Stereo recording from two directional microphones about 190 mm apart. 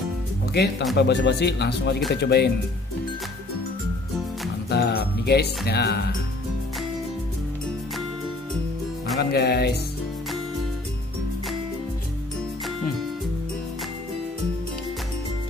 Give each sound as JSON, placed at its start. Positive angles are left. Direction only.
{"t": 0.5, "sound": "speech", "side_deg": 60}
{"t": 4.6, "sound": "music", "side_deg": 55}
{"t": 5.7, "sound": "speech", "side_deg": 60}
{"t": 9.2, "sound": "speech", "side_deg": 60}